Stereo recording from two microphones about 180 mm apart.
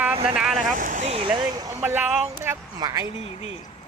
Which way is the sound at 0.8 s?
45° right (ahead or behind).